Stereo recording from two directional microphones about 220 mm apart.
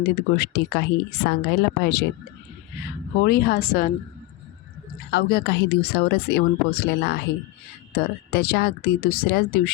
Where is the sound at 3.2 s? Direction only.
45° left (ahead or behind).